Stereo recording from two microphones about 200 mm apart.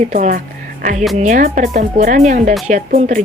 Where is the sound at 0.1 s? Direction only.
40° right (ahead or behind).